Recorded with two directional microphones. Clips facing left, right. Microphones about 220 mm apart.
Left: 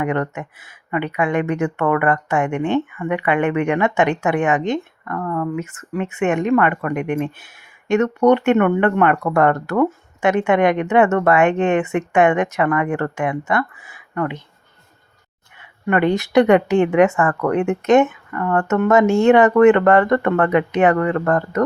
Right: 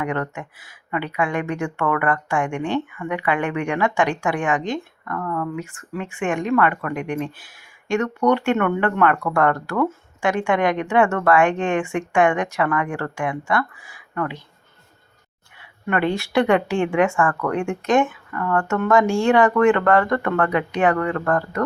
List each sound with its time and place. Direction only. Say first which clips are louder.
0.0 s speech: left 4 dB; 20° left (ahead or behind)
15.9 s speech: left 4 dB; 20° left (ahead or behind)